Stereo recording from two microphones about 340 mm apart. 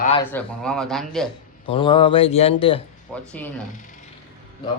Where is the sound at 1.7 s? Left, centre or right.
Centre.